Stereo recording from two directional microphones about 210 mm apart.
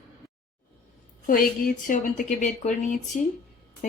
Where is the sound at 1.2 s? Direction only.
40° left (ahead or behind).